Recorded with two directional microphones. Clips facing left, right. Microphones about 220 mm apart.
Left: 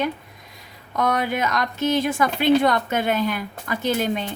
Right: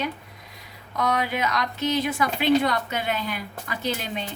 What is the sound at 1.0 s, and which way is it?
A woman's voice, 50° left (ahead or behind).